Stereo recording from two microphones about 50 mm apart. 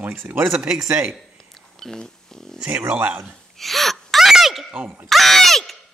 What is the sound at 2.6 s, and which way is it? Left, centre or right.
Speech, right.